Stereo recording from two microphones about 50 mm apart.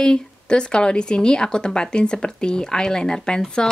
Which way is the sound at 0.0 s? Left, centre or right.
Centre.